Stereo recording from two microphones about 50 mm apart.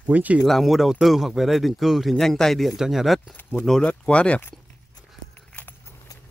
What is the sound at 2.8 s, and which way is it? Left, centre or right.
Speech, centre.